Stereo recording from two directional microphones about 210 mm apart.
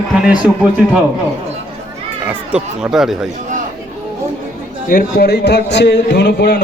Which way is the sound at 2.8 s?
Centre (ahead or behind).